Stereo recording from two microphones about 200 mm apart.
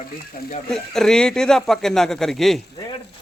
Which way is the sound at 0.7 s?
Centre (ahead or behind).